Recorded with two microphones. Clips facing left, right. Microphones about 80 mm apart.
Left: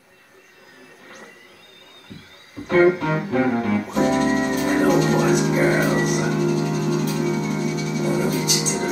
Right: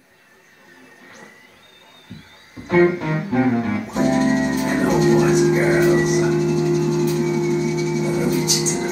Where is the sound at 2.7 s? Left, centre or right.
Left.